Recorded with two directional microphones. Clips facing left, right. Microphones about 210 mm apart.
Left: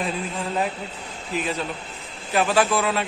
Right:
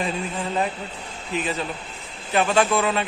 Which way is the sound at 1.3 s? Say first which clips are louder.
Even; centre (ahead or behind).